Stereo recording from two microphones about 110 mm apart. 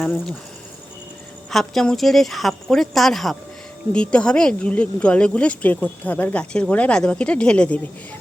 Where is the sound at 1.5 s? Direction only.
5° left (ahead or behind).